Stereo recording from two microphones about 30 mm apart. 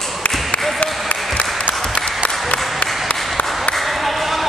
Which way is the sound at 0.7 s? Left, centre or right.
Left.